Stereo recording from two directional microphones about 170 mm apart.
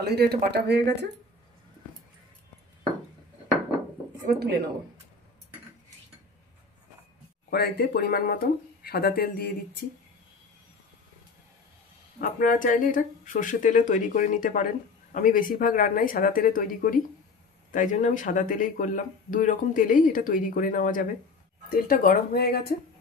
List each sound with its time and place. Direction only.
0.0 s speech: 70° right (ahead or behind)
4.3 s speech: 70° right (ahead or behind)
7.4 s speech: 70° left (ahead or behind)
12.2 s speech: 55° left (ahead or behind)